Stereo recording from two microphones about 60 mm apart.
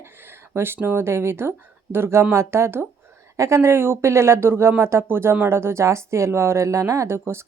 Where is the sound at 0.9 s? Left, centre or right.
Right.